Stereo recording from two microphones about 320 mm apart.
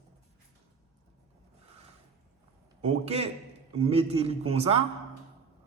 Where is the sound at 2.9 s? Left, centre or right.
Centre.